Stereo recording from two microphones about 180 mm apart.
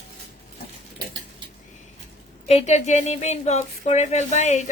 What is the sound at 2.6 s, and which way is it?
Speech, 40° left (ahead or behind).